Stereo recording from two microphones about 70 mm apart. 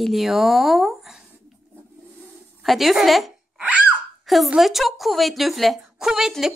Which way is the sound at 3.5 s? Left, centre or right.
Centre.